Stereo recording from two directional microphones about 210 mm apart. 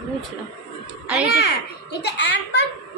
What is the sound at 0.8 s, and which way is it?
Speech, 5° right (ahead or behind).